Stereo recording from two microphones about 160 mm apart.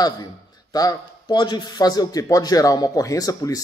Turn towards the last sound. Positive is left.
turn(degrees=20)  # may be behind; listen again after turning